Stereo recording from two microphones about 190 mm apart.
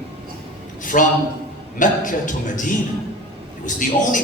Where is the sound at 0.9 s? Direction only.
45° left (ahead or behind).